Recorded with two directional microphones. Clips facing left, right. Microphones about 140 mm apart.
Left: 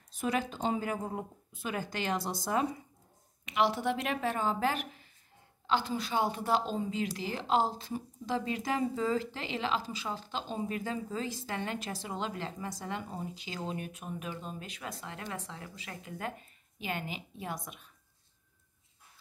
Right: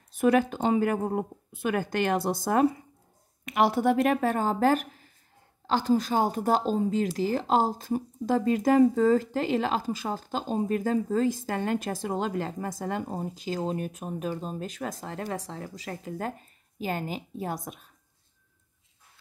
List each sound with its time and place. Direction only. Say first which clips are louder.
0.1 s speech: right 10 dB; 55° right (ahead or behind)